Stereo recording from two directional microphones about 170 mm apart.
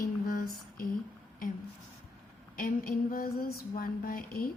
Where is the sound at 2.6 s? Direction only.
60° left (ahead or behind).